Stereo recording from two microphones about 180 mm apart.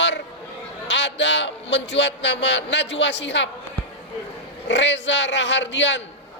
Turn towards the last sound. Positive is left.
turn(degrees=80)